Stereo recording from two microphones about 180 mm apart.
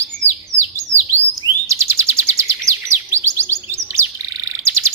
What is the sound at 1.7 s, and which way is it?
Chirp, 15° right (ahead or behind).